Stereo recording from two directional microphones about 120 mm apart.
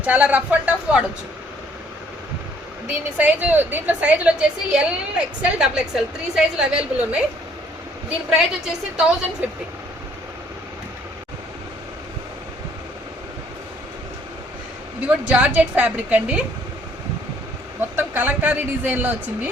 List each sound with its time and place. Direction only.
0.0 s a woman's voice: 10° right (ahead or behind)
2.8 s a woman's voice: 15° right (ahead or behind)
8.3 s a woman's voice: 5° right (ahead or behind)
15.0 s a woman's voice: 10° right (ahead or behind)
17.7 s a woman's voice: 15° right (ahead or behind)